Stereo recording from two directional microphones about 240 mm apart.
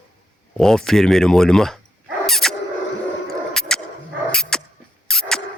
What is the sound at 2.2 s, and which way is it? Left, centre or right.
Dog, centre.